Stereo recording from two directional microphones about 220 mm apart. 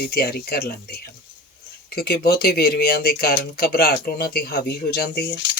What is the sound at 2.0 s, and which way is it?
Speech, 45° left (ahead or behind).